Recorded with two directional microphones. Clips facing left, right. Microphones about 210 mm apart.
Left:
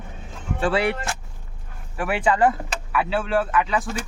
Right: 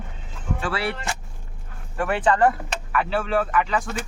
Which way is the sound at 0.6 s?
20° left (ahead or behind).